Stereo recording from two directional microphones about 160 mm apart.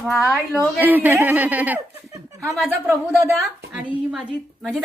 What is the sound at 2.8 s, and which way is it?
Speech, 15° right (ahead or behind).